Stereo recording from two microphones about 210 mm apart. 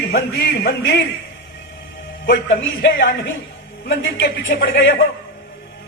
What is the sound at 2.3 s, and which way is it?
A man's voice, 60° left (ahead or behind).